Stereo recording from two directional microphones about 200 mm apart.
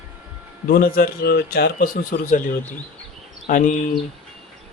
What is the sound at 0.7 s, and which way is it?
Speech, 50° left (ahead or behind).